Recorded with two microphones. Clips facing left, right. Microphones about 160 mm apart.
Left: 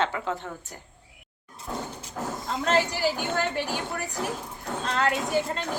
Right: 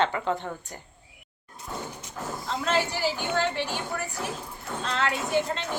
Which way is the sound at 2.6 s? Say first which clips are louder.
Left 3 dB; 45° left (ahead or behind).